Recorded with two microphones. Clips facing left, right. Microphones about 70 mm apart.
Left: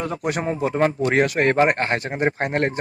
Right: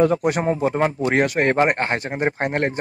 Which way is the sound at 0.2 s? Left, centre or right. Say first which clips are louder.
Right 3 dB; right.